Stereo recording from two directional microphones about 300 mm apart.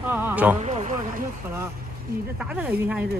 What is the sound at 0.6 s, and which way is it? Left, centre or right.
Speech, right.